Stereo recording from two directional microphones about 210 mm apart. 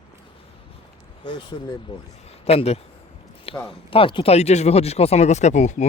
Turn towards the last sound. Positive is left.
turn(degrees=35)  # may be behind; listen again after turning